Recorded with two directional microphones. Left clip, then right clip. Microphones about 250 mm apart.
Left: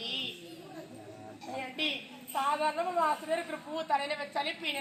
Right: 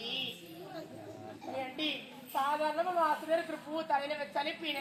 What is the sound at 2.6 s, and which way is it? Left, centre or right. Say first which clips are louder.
A woman's voice: left 1 dB; centre.